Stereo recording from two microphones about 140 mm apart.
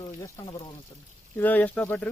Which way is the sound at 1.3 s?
10° left (ahead or behind).